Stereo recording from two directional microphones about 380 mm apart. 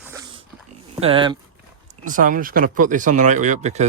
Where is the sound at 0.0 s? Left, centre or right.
Centre.